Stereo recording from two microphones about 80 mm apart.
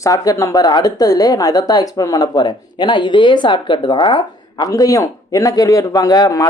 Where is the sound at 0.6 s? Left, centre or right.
Left.